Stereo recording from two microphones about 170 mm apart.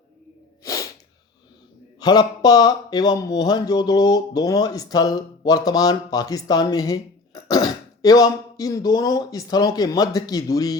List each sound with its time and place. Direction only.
0.6 s sneeze: 20° left (ahead or behind)
2.0 s speech: 25° left (ahead or behind)